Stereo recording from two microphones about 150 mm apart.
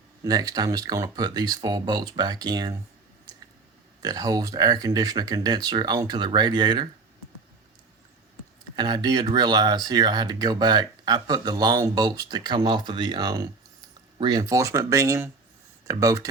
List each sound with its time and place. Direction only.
0.3 s speech: 25° right (ahead or behind)
4.0 s speech: 25° right (ahead or behind)
8.7 s speech: 30° right (ahead or behind)